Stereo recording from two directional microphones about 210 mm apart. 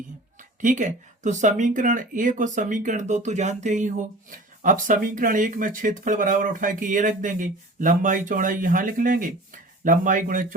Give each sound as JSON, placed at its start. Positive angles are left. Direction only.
{"t": 0.3, "sound": "speech", "side_deg": -35}